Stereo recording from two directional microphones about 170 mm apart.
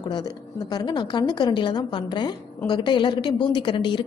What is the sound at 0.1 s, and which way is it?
A woman's voice, 25° left (ahead or behind).